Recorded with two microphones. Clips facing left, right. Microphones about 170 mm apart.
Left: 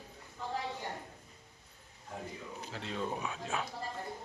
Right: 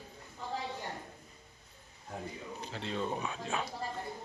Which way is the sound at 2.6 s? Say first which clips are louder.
Right 2 dB; 5° left (ahead or behind).